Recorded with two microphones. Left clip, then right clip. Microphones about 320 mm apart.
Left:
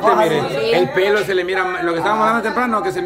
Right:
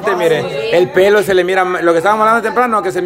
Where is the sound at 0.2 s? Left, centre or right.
Centre.